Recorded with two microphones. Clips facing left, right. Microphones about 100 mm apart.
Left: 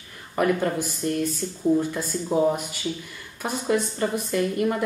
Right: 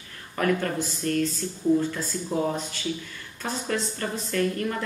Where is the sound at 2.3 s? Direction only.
10° left (ahead or behind).